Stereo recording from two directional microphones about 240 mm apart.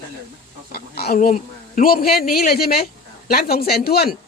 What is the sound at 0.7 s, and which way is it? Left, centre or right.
A man's voice, left.